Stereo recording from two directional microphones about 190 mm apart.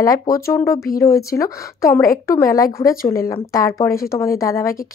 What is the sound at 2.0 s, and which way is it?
Speech, 50° left (ahead or behind).